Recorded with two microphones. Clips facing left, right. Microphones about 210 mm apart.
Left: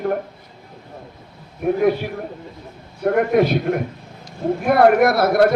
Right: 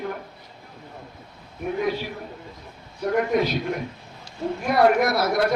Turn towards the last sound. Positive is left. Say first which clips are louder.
# left 7 dB
turn(degrees=55)  # may be behind; listen again after turning